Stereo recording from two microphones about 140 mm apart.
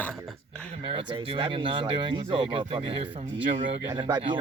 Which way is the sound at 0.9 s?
40° right (ahead or behind).